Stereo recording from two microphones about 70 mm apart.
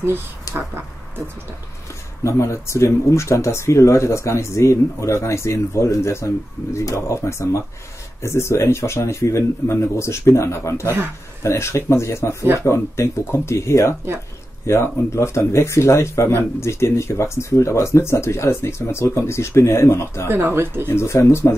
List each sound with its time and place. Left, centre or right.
0.5 s a sound: left
2.2 s speech: left
20.2 s speech: right
20.9 s speech: left